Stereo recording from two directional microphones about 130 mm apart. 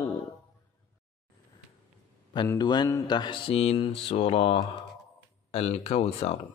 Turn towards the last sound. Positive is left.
turn(degrees=55)  # may be behind; listen again after turning